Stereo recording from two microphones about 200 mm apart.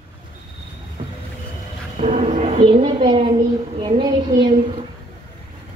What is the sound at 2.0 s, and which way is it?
A child's voice, 40° right (ahead or behind).